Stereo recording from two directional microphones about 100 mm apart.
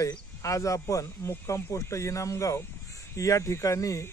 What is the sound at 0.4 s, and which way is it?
A man's voice, 30° left (ahead or behind).